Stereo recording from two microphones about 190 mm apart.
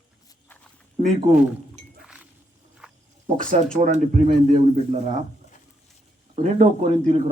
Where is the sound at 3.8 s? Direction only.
40° right (ahead or behind).